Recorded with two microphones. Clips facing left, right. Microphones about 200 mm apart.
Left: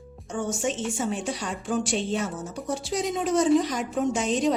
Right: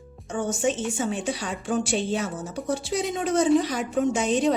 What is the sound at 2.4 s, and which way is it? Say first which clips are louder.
Speech: right 3 dB; 65° right (ahead or behind).